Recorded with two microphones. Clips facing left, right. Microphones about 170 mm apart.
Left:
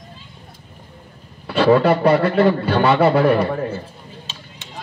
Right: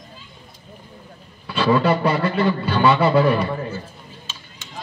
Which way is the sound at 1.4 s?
60° left (ahead or behind).